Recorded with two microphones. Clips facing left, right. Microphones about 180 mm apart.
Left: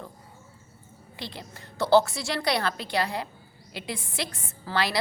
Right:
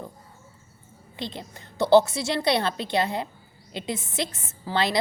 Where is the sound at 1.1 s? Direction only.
20° right (ahead or behind).